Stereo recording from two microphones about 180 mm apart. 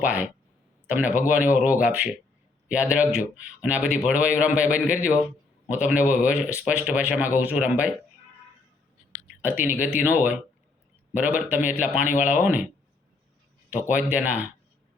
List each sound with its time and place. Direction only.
0.0 s a man's voice: 10° right (ahead or behind)
9.2 s a sound: 10° right (ahead or behind)
9.8 s a man's voice: 10° right (ahead or behind)
12.0 s speech: 45° left (ahead or behind)
12.3 s a man's voice: 10° right (ahead or behind)
13.9 s a man's voice: 10° right (ahead or behind)